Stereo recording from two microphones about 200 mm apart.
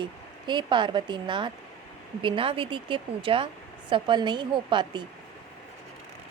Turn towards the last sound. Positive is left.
turn(degrees=-25)  # may be behind; listen again after turning